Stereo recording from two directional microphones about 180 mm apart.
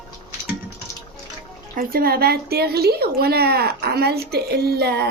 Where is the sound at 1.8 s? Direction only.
55° right (ahead or behind).